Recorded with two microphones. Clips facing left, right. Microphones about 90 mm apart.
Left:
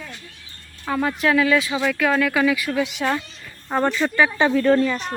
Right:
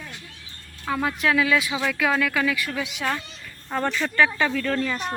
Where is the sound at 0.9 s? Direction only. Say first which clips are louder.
Left 3 dB; centre (ahead or behind).